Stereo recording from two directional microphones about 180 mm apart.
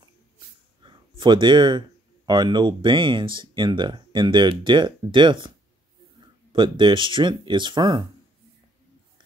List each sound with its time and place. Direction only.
0.8 s speech: 25° right (ahead or behind)
6.5 s speech: 25° right (ahead or behind)